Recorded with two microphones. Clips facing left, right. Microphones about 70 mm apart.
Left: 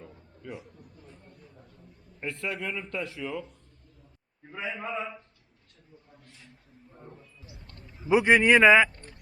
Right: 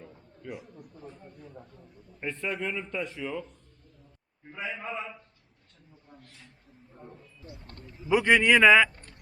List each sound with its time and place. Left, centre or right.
0.0 s a sound: centre
2.2 s a man's voice: centre
4.6 s speech: centre
6.9 s speech: centre